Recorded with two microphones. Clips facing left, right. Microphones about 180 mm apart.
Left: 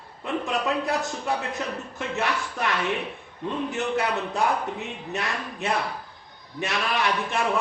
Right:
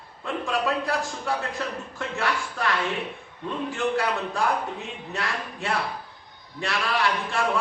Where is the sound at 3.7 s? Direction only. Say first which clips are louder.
Right 2 dB; 20° left (ahead or behind).